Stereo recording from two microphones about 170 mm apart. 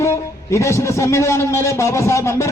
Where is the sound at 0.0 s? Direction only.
15° left (ahead or behind).